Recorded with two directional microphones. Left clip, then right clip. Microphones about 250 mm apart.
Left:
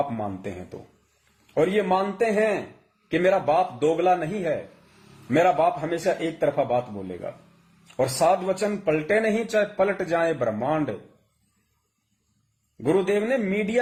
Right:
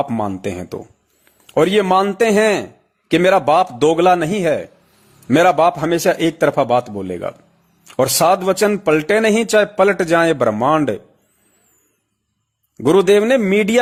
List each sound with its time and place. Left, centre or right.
0.2 s speech: right
12.7 s speech: right